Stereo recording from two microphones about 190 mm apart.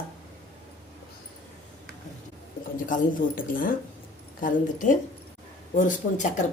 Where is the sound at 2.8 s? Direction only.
45° left (ahead or behind).